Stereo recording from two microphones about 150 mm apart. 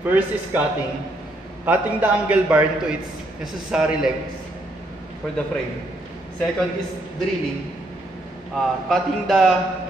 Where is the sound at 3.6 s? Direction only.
5° right (ahead or behind).